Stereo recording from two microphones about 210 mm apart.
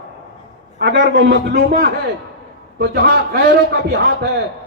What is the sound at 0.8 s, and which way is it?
Speech, 60° right (ahead or behind).